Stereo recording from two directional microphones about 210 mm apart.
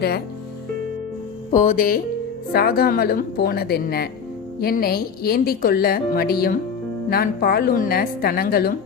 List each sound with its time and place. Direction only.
1.5 s a woman's voice: 40° left (ahead or behind)